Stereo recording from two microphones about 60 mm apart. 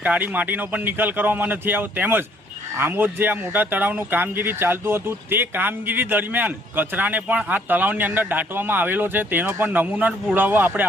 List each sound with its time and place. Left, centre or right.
0.0 s a man's voice: right